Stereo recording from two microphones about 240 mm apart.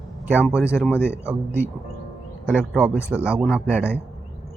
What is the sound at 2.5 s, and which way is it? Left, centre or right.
Speech, centre.